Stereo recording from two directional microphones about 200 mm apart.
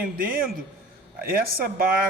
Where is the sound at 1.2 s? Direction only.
45° right (ahead or behind).